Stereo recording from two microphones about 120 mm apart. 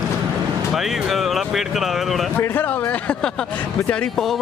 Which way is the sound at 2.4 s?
15° left (ahead or behind).